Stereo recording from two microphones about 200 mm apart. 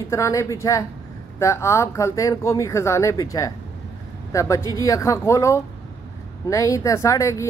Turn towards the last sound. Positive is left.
turn(degrees=15)  # may be behind; listen again after turning